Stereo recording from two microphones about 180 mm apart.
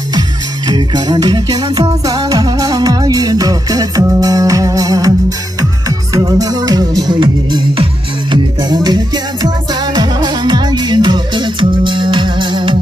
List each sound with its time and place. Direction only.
0.7 s music: 25° right (ahead or behind)